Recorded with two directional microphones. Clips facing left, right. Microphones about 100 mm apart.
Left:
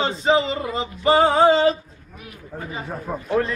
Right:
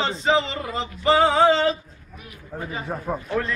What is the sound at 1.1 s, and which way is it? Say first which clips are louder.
Speech: left 2 dB; 40° left (ahead or behind).